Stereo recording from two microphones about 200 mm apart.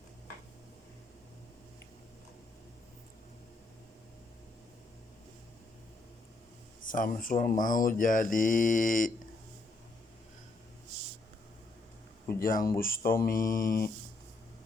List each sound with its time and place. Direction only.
6.8 s speech: 40° left (ahead or behind)
12.4 s speech: 45° left (ahead or behind)